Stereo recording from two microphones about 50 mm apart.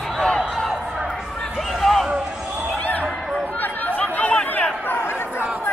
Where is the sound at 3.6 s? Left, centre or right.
Left.